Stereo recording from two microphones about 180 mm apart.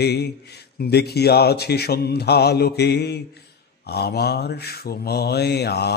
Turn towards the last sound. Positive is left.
turn(degrees=65)  # may be behind; listen again after turning